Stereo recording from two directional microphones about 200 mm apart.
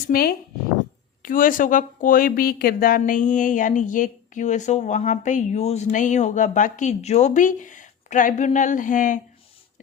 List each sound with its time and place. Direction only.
0.1 s speech: 50° left (ahead or behind)